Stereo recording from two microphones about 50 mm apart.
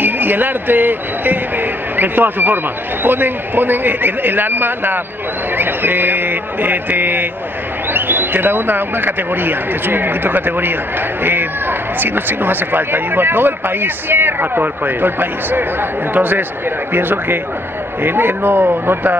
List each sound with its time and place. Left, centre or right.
0.0 s speech: right